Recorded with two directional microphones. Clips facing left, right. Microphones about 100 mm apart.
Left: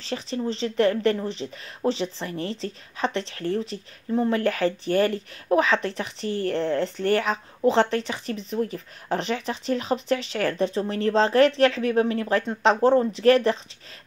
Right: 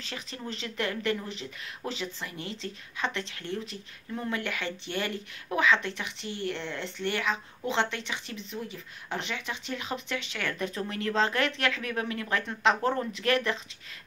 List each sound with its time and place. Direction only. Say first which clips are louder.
0.0 s speech: left 11 dB; 30° left (ahead or behind)